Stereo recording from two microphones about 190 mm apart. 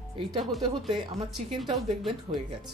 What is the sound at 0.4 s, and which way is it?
Speech, centre (ahead or behind).